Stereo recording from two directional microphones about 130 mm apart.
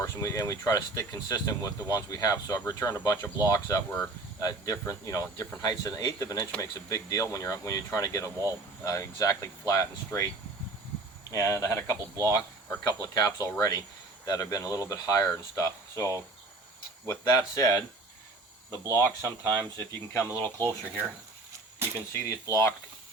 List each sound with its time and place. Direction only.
0.0 s speech: 25° left (ahead or behind)
11.3 s speech: 20° left (ahead or behind)
19.7 s speech: 20° left (ahead or behind)
20.6 s speech: 20° right (ahead or behind)
22.1 s speech: 20° left (ahead or behind)